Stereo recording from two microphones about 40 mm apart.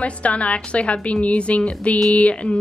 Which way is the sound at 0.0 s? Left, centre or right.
Left.